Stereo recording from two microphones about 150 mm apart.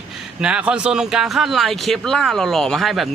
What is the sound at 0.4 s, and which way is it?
Speech, 5° right (ahead or behind).